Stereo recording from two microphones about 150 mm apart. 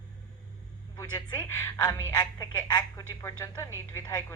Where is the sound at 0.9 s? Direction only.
25° left (ahead or behind).